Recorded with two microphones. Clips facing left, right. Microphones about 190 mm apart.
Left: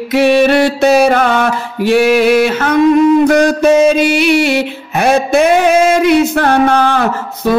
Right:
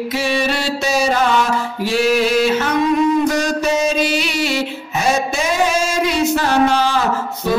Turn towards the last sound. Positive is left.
turn(degrees=60)  # may be behind; listen again after turning